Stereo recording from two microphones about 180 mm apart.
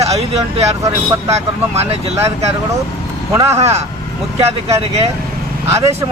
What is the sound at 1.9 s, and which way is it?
Speech, 35° right (ahead or behind).